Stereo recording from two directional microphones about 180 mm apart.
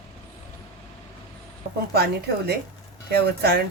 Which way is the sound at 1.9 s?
60° right (ahead or behind).